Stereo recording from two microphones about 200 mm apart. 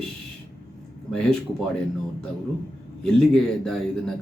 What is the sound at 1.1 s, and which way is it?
Speech, 5° left (ahead or behind).